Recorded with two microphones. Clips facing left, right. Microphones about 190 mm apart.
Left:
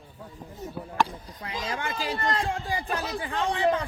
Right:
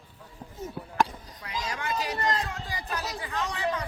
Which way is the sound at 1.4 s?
25° left (ahead or behind).